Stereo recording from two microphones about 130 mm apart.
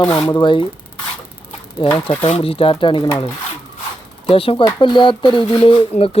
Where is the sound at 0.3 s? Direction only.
35° left (ahead or behind).